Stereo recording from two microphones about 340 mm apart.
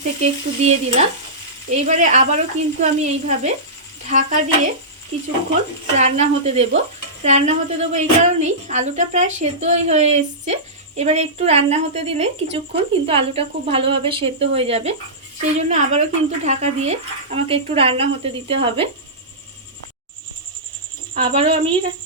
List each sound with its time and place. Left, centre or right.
0.2 s speech: centre
21.2 s speech: centre